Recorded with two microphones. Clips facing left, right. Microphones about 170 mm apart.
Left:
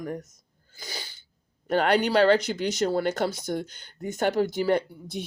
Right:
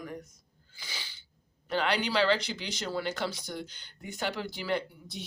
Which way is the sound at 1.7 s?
50° left (ahead or behind).